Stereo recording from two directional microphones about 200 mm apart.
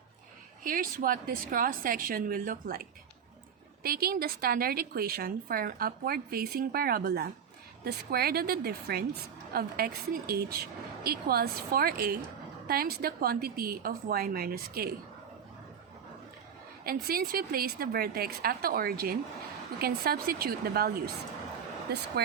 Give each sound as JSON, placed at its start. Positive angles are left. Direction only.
{"t": 0.6, "sound": "a woman's voice", "side_deg": -45}
{"t": 3.8, "sound": "a woman's voice", "side_deg": -50}
{"t": 16.8, "sound": "a woman's voice", "side_deg": -50}